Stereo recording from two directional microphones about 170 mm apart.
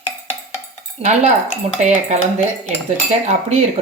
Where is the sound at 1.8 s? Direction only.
40° right (ahead or behind).